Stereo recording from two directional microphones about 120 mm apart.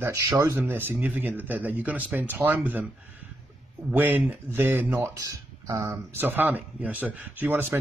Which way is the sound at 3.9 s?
15° right (ahead or behind).